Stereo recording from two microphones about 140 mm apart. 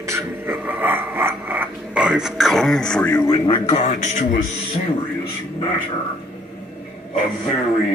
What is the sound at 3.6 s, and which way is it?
Speech, 55° left (ahead or behind).